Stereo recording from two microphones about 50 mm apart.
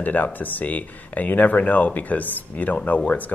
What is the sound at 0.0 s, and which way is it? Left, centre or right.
Speech, left.